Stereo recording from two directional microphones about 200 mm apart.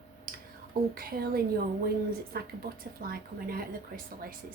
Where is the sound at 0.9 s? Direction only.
50° right (ahead or behind).